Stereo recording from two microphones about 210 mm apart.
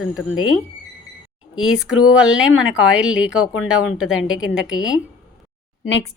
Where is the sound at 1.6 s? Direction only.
Centre (ahead or behind).